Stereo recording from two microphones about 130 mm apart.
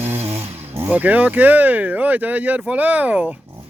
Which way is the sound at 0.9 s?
10° right (ahead or behind).